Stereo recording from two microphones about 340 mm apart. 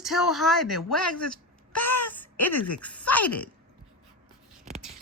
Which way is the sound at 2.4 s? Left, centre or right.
Left.